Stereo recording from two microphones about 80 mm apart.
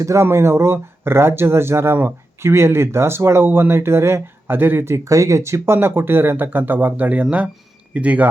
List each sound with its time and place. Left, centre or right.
0.0 s speech: right; by 8.3 s centre